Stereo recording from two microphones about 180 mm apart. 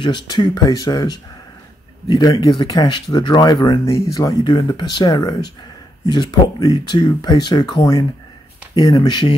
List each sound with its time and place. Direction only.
0.0 s speech: 25° left (ahead or behind)